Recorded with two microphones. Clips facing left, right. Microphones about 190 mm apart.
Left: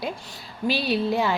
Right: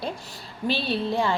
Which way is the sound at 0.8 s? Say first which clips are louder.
Left 3 dB; 25° right (ahead or behind).